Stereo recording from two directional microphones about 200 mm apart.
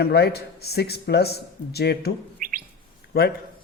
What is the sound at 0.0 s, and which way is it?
A man's voice, 55° left (ahead or behind).